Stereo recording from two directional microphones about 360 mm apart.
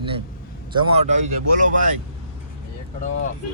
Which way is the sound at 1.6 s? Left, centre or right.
Right.